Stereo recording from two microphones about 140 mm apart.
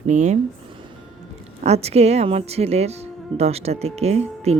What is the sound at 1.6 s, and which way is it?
Speech, 50° right (ahead or behind).